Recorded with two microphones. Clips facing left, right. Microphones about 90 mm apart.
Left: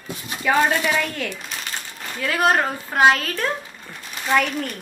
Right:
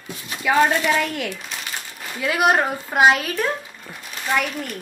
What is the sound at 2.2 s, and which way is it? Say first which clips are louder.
A woman's voice: right 1 dB; 15° right (ahead or behind).